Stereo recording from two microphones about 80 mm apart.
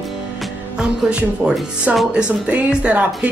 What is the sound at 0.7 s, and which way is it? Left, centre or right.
Music, centre.